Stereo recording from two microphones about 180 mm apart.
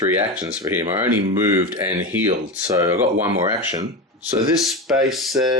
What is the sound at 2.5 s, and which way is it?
Speech, 10° right (ahead or behind).